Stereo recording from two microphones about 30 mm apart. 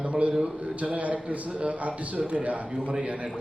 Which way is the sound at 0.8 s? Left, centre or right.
Right.